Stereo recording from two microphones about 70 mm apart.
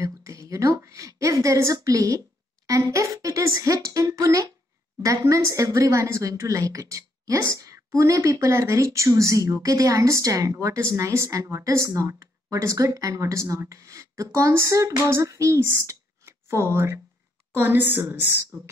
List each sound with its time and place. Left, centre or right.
0.0 s a woman's voice: right